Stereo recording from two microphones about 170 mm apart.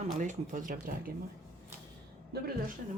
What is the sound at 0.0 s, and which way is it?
Speech, 45° right (ahead or behind).